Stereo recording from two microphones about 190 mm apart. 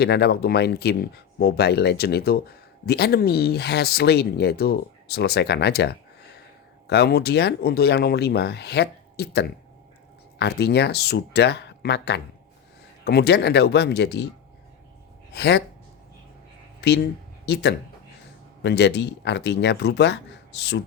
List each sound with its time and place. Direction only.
0.0 s speech: 60° left (ahead or behind)
15.3 s speech: 60° left (ahead or behind)
16.8 s speech: 60° left (ahead or behind)